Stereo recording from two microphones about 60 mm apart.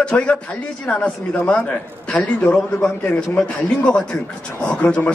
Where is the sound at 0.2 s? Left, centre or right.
Left.